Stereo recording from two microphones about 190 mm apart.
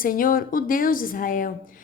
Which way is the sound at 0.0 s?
50° left (ahead or behind).